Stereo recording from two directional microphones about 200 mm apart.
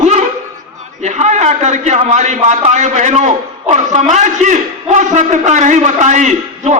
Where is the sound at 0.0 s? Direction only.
35° right (ahead or behind).